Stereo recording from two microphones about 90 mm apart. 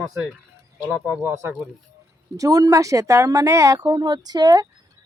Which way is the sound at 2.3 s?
40° right (ahead or behind).